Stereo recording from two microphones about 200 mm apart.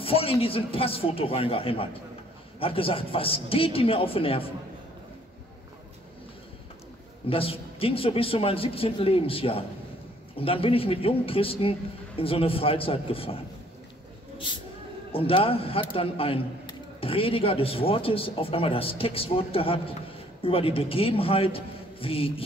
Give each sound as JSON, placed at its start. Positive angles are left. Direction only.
{"t": 0.0, "sound": "a man's voice", "side_deg": 30}
{"t": 7.2, "sound": "a man's voice", "side_deg": 30}
{"t": 15.1, "sound": "a man's voice", "side_deg": 30}